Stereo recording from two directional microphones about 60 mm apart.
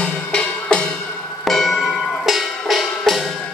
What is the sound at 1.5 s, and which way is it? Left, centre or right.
Music, centre.